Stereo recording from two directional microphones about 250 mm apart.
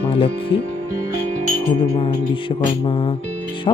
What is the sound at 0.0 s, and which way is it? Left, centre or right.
Speech, left.